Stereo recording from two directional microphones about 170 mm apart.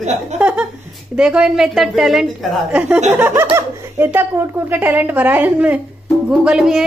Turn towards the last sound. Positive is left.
turn(degrees=-5)  # may be behind; listen again after turning